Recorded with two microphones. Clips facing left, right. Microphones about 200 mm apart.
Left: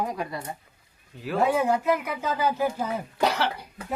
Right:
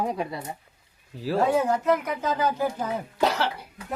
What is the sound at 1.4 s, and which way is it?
Speech, 10° left (ahead or behind).